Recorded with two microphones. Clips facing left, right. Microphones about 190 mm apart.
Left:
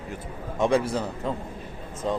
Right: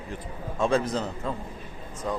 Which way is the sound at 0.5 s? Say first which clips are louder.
Left 2 dB; 15° left (ahead or behind).